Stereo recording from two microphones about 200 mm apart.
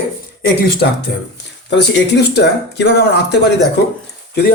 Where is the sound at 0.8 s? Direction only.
50° left (ahead or behind).